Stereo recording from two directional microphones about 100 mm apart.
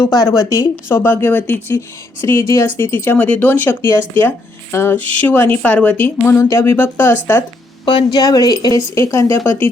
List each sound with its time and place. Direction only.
0.0 s a woman's voice: 35° left (ahead or behind)
0.9 s a woman's voice: 25° left (ahead or behind)
7.9 s speech: 55° left (ahead or behind)
8.2 s a woman's voice: 40° left (ahead or behind)